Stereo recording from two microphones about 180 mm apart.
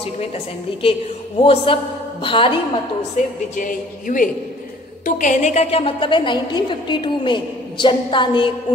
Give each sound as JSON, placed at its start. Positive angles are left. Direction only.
{"t": 0.8, "sound": "a woman's voice", "side_deg": 30}
{"t": 3.2, "sound": "a woman's voice", "side_deg": 45}